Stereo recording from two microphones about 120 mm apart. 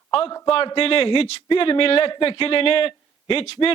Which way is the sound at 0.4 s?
45° left (ahead or behind).